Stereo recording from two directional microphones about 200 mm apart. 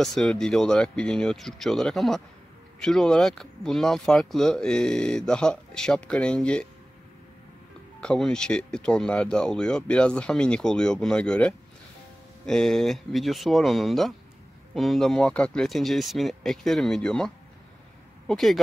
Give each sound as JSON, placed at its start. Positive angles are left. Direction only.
{"t": 0.0, "sound": "speech", "side_deg": 0}
{"t": 8.0, "sound": "speech", "side_deg": 5}